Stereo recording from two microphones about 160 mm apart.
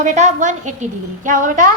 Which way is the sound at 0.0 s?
50° right (ahead or behind).